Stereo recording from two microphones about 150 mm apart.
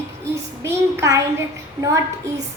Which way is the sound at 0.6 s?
20° right (ahead or behind).